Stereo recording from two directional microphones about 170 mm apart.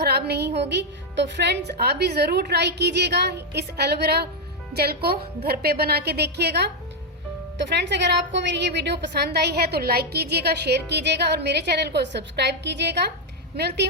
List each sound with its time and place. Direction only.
0.0 s a woman's voice: 75° right (ahead or behind)
7.7 s a woman's voice: 90° right